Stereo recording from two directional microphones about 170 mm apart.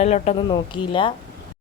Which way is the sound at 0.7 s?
30° left (ahead or behind).